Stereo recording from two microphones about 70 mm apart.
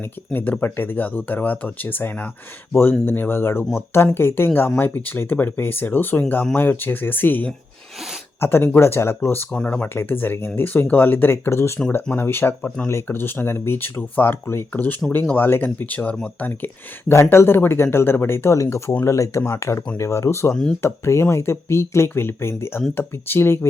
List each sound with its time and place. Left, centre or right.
0.3 s speech: left
12.6 s speech: centre
12.9 s speech: left
20.5 s speech: centre
20.8 s speech: left